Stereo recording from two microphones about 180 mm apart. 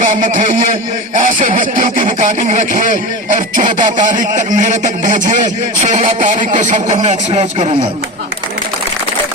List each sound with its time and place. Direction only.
0.0 s speech: 45° right (ahead or behind)